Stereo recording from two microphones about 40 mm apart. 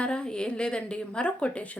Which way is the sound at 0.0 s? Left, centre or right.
Left.